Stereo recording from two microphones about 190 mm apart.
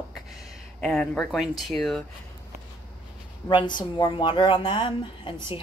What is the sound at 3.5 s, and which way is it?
A woman's voice, 25° left (ahead or behind).